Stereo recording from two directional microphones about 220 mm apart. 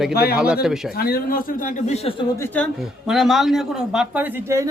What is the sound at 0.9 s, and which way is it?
Speech, 45° left (ahead or behind).